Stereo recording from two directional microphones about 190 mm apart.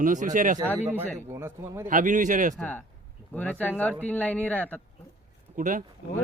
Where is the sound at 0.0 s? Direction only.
40° right (ahead or behind).